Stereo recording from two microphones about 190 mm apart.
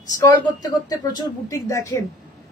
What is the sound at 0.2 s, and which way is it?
A woman's voice, 20° left (ahead or behind).